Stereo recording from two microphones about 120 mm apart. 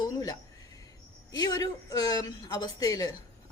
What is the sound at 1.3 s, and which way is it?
A woman's voice, 30° left (ahead or behind).